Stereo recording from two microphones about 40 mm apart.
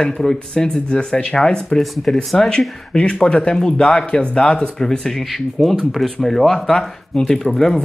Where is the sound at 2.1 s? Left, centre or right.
Centre.